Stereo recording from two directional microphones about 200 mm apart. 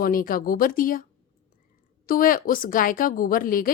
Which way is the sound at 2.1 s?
45° left (ahead or behind).